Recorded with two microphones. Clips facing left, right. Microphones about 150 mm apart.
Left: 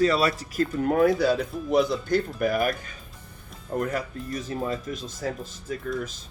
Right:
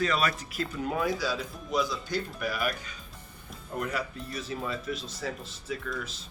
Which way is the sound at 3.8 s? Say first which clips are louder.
Left 4 dB; 45° left (ahead or behind).